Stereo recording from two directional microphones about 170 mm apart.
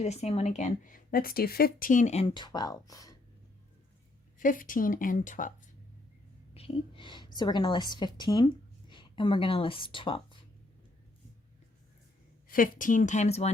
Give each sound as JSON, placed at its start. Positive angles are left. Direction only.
{"t": 0.0, "sound": "speech", "side_deg": 40}
{"t": 2.3, "sound": "speech", "side_deg": 25}
{"t": 4.4, "sound": "speech", "side_deg": 50}
{"t": 6.5, "sound": "a woman's voice", "side_deg": 35}
{"t": 12.5, "sound": "speech", "side_deg": 55}